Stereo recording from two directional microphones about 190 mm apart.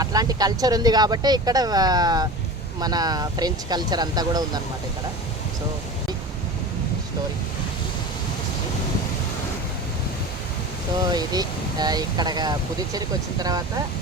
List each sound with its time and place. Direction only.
0.0 s speech: 20° right (ahead or behind)
11.1 s speech: 20° right (ahead or behind)